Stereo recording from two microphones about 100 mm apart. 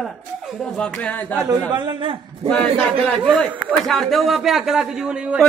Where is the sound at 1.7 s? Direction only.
50° right (ahead or behind).